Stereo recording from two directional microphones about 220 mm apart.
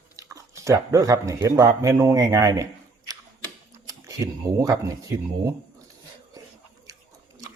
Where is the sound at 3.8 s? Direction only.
15° right (ahead or behind).